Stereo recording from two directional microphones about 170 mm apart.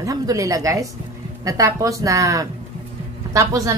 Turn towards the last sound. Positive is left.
turn(degrees=-20)  # may be behind; listen again after turning